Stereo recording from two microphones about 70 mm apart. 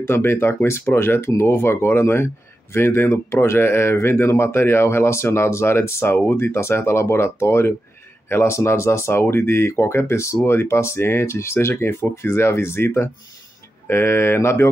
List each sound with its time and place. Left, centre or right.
0.0 s speech: left